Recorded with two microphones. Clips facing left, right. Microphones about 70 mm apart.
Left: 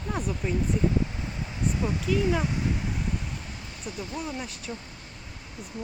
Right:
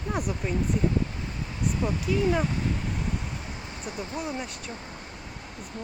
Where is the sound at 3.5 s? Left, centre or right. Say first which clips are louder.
Right 3 dB; right.